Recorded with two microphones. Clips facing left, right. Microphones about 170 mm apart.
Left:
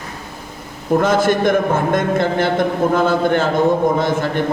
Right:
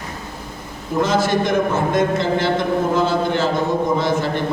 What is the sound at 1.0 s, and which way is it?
A man's voice, 50° left (ahead or behind).